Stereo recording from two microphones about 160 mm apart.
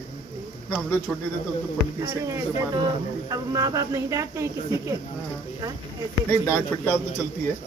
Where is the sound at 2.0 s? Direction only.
20° right (ahead or behind).